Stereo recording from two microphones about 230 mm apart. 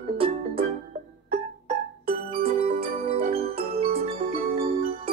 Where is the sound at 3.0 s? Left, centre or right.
Right.